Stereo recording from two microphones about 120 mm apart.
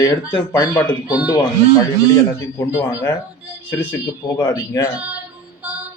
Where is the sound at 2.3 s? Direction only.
20° left (ahead or behind).